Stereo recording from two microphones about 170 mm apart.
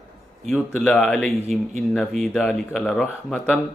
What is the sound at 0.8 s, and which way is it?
Speech, 5° left (ahead or behind).